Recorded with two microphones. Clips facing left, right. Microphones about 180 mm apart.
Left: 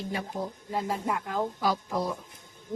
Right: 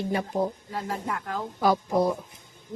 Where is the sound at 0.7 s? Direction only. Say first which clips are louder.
Left 7 dB; 10° left (ahead or behind).